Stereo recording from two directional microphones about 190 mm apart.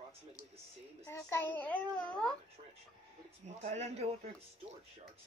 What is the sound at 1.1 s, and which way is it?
A child's voice, 15° left (ahead or behind).